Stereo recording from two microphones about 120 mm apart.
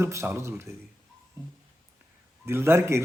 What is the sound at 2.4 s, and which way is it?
Speech, 20° right (ahead or behind).